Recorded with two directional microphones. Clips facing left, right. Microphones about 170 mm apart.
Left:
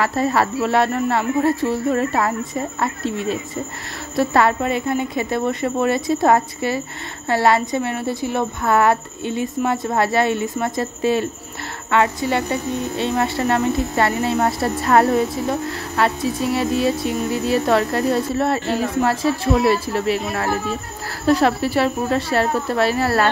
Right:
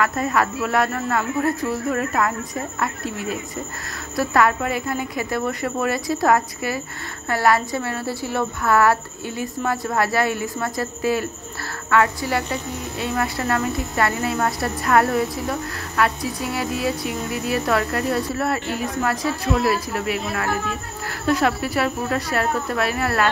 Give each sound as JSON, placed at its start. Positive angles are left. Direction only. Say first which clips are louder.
{"t": 0.0, "sound": "speech", "louder": "left 2 dB", "side_deg": 30}